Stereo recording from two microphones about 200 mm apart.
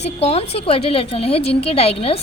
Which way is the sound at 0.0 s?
30° left (ahead or behind).